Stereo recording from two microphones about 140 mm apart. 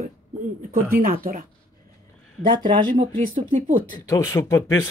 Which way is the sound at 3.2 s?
75° right (ahead or behind).